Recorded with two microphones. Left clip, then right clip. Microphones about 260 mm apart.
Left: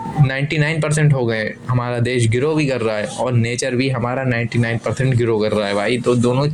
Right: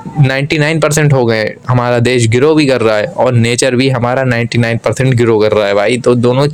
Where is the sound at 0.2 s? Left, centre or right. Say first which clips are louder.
Right 8 dB; right.